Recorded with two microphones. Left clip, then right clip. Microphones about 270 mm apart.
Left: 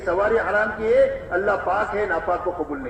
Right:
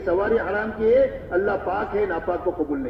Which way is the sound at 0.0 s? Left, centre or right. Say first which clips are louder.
Left 1 dB; left.